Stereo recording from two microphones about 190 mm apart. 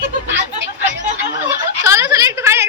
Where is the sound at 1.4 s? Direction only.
10° right (ahead or behind).